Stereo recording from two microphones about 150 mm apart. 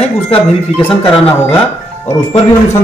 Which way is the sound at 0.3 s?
40° left (ahead or behind).